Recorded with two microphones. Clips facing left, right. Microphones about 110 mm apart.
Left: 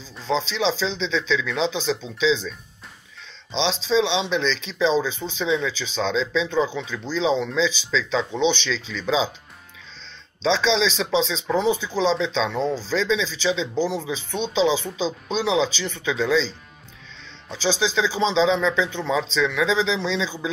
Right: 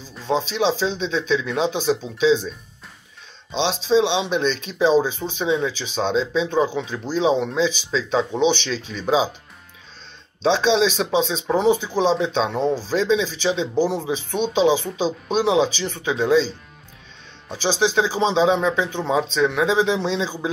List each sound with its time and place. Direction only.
0.3 s speech: 50° right (ahead or behind)
3.5 s speech: 50° right (ahead or behind)
10.4 s speech: 50° right (ahead or behind)
12.5 s speech: 10° right (ahead or behind)
12.9 s speech: 45° right (ahead or behind)
17.5 s speech: 50° right (ahead or behind)